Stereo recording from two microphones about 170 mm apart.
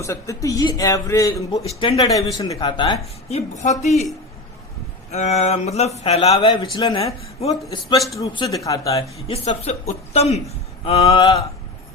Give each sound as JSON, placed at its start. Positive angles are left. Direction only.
{"t": 0.0, "sound": "speech", "side_deg": 15}
{"t": 1.6, "sound": "a woman's voice", "side_deg": 30}
{"t": 2.0, "sound": "speech", "side_deg": 20}
{"t": 3.2, "sound": "a woman's voice", "side_deg": 40}
{"t": 5.1, "sound": "a woman's voice", "side_deg": 40}
{"t": 6.4, "sound": "a woman's voice", "side_deg": 25}
{"t": 7.0, "sound": "a woman's voice", "side_deg": 35}
{"t": 7.7, "sound": "speech", "side_deg": 25}
{"t": 9.1, "sound": "a woman's voice", "side_deg": 35}